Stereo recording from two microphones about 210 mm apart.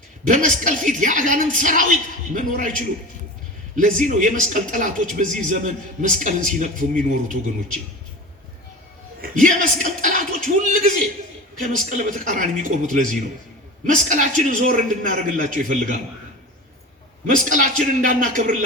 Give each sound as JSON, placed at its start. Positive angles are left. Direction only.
{"t": 0.3, "sound": "speech", "side_deg": -35}
{"t": 9.2, "sound": "speech", "side_deg": -40}
{"t": 17.2, "sound": "speech", "side_deg": -40}